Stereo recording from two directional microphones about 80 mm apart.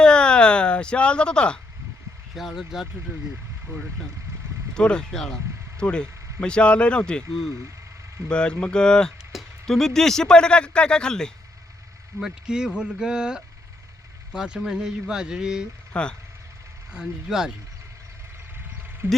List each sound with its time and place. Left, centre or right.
0.0 s a sound: centre
2.3 s speech: centre
4.7 s speech: centre
8.3 s speech: centre
9.3 s a sound: centre
9.6 s speech: centre
12.2 s speech: centre
15.9 s speech: centre
16.9 s speech: centre
19.0 s speech: right